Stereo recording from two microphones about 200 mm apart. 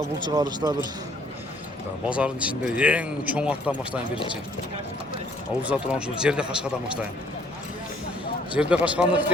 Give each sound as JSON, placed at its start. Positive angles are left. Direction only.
{"t": 0.3, "sound": "speech", "side_deg": -20}
{"t": 2.0, "sound": "speech", "side_deg": -5}
{"t": 5.6, "sound": "speech", "side_deg": -5}
{"t": 8.5, "sound": "speech", "side_deg": -5}